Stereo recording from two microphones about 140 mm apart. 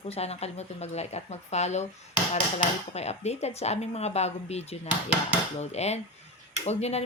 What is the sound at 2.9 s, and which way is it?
Speech, 50° left (ahead or behind).